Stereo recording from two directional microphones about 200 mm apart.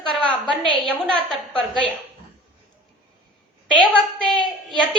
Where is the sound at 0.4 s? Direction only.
25° right (ahead or behind).